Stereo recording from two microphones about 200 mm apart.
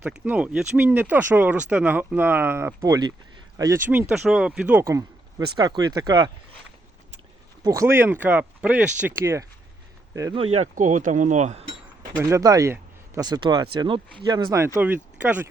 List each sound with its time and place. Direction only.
0.0 s speech: 5° right (ahead or behind)
7.6 s speech: 15° right (ahead or behind)
10.3 s speech: 30° right (ahead or behind)
12.1 s speech: 15° right (ahead or behind)